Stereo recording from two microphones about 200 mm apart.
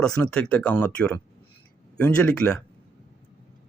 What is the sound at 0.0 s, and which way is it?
Speech, 5° left (ahead or behind).